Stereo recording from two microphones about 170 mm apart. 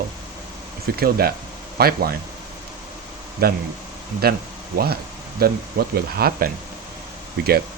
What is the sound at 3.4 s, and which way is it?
Speech, 65° right (ahead or behind).